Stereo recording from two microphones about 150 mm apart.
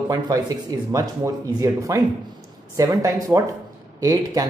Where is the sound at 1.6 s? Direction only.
20° right (ahead or behind).